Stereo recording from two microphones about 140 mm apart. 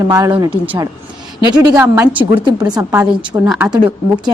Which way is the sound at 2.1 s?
35° right (ahead or behind).